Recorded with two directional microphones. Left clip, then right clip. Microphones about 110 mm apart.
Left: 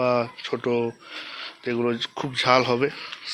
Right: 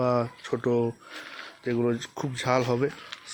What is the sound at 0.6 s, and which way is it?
Speech, 30° right (ahead or behind).